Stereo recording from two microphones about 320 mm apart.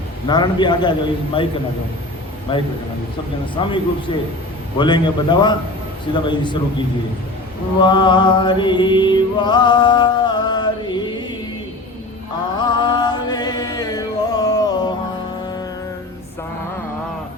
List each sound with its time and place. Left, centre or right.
0.3 s a man's voice: centre
2.5 s a man's voice: centre
7.8 s mantra: centre
12.5 s music: centre